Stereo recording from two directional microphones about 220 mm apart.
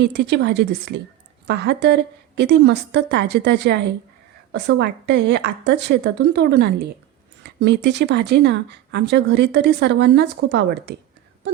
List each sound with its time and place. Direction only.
0.0 s speech: 50° right (ahead or behind)